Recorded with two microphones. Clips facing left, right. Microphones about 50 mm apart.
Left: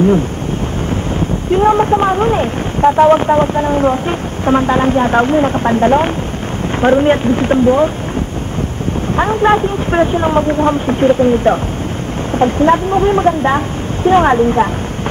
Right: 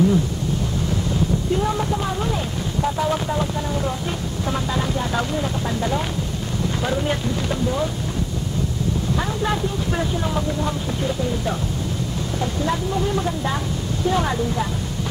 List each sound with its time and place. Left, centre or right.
1.5 s speech: left
9.1 s speech: left